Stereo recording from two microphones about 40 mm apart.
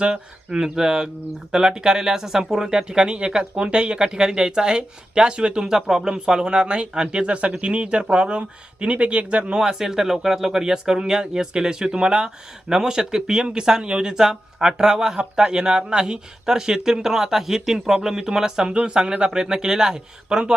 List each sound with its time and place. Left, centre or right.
0.0 s speech: centre
9.6 s speech: centre
18.7 s speech: right